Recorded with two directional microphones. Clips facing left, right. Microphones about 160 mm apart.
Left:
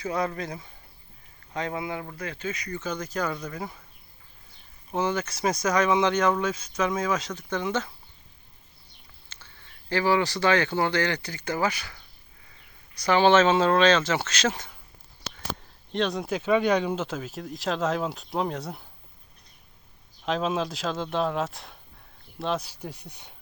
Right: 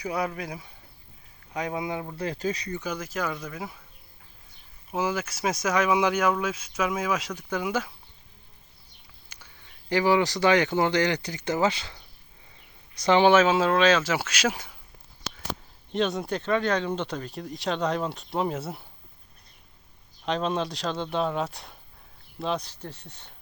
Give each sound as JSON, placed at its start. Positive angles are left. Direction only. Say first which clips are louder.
{"t": 0.0, "sound": "speech", "louder": "left 1 dB", "side_deg": -10}
{"t": 2.1, "sound": "speech", "louder": "right 4 dB", "side_deg": -35}
{"t": 2.7, "sound": "speech", "louder": "left 1 dB", "side_deg": -10}
{"t": 4.9, "sound": "speech", "louder": "left 1 dB", "side_deg": -5}
{"t": 9.3, "sound": "a sound", "louder": "even", "side_deg": -15}
{"t": 9.9, "sound": "speech", "louder": "right 1 dB", "side_deg": -15}
{"t": 15.9, "sound": "speech", "louder": "even", "side_deg": 0}
{"t": 20.2, "sound": "speech", "louder": "even", "side_deg": 0}